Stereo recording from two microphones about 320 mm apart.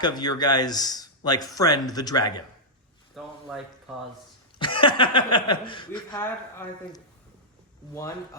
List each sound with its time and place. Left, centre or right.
0.0 s a man's voice: centre
3.2 s a sound: centre
4.5 s a man's voice: centre
7.9 s a man's voice: centre